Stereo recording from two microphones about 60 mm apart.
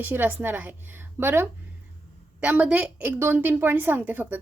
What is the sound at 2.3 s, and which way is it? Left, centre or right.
A woman's voice, right.